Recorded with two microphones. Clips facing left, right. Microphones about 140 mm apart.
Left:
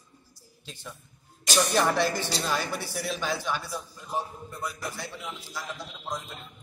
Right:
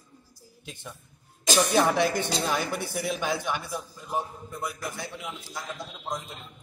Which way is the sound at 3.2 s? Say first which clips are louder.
Right 1 dB; 15° right (ahead or behind).